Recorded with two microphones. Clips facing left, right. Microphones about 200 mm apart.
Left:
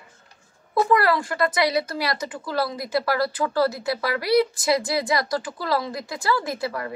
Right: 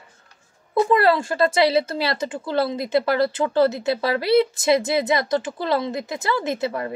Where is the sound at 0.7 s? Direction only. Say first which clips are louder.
Right 3 dB; 25° right (ahead or behind).